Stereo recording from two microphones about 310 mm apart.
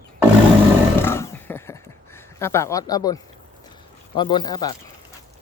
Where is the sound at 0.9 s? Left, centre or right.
Centre.